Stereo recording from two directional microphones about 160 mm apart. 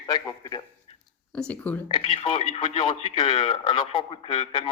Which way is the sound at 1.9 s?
35° left (ahead or behind).